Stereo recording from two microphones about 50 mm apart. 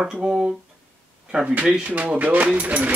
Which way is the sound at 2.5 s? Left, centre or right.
Right.